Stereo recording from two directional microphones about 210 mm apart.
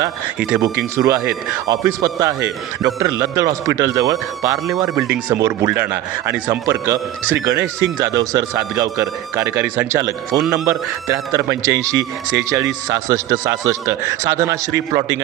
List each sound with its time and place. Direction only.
0.8 s a man's voice: 15° right (ahead or behind)
5.0 s a man's voice: 5° right (ahead or behind)